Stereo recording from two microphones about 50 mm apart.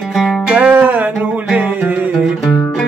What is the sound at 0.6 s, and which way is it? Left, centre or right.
Music, right.